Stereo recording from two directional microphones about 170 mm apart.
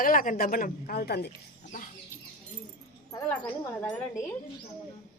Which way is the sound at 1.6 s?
55° left (ahead or behind).